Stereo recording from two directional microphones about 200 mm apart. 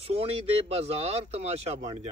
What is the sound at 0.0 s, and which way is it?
Speech, 30° right (ahead or behind).